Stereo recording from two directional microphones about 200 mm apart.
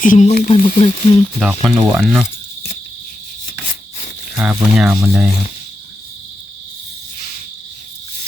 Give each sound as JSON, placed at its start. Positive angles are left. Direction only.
{"t": 0.0, "sound": "speech", "side_deg": 40}
{"t": 0.8, "sound": "speech", "side_deg": 25}
{"t": 1.6, "sound": "speech", "side_deg": -5}
{"t": 4.4, "sound": "speech", "side_deg": -5}